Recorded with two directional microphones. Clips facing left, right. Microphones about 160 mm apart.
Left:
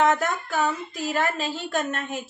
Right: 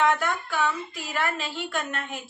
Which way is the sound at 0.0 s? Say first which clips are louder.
Left 2 dB; 45° left (ahead or behind).